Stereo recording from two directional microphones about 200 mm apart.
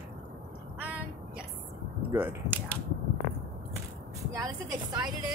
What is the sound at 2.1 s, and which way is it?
Speech, 10° right (ahead or behind).